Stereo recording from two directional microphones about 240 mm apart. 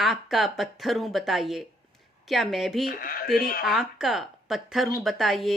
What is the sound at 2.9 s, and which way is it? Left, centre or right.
Speech, left.